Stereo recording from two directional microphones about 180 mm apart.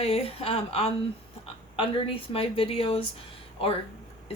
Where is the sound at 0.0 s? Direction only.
35° left (ahead or behind).